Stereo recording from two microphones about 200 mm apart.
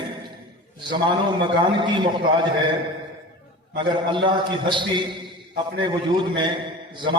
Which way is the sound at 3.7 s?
25° right (ahead or behind).